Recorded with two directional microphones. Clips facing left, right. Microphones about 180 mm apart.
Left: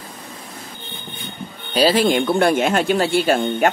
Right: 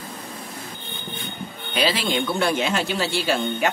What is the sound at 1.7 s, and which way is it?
Speech, 40° left (ahead or behind).